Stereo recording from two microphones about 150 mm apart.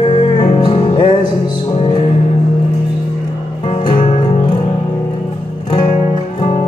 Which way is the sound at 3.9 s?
50° left (ahead or behind).